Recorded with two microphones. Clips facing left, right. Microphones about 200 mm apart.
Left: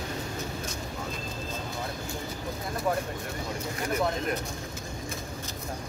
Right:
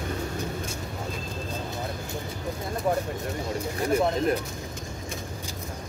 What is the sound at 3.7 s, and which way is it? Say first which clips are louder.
Speech: right 5 dB; 30° right (ahead or behind).